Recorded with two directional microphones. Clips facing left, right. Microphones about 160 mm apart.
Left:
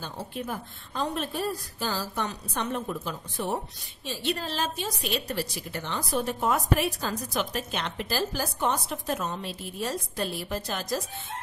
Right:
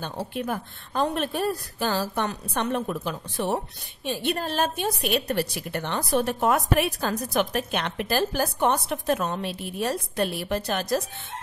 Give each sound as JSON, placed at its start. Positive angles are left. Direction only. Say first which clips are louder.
{"t": 0.0, "sound": "a woman's voice", "louder": "right 5 dB", "side_deg": -65}
{"t": 4.0, "sound": "a woman's voice", "louder": "right 4 dB", "side_deg": -55}